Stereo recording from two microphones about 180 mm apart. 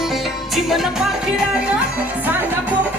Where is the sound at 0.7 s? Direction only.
5° right (ahead or behind).